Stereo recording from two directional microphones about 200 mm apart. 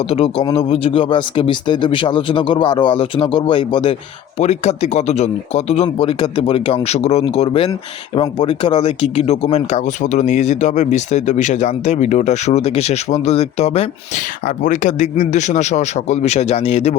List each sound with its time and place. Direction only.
0.0 s speech: 30° left (ahead or behind)